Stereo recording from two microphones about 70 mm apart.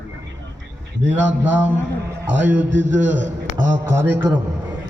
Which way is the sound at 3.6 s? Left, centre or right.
Right.